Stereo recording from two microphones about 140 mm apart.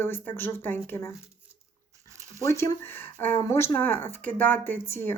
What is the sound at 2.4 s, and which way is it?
Speech, 20° left (ahead or behind).